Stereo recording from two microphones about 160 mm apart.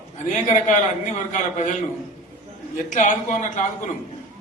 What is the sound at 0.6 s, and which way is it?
A man's voice, 50° left (ahead or behind).